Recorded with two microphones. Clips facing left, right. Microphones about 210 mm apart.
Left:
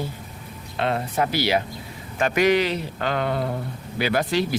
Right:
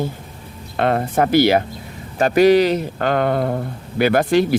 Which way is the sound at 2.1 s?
35° right (ahead or behind).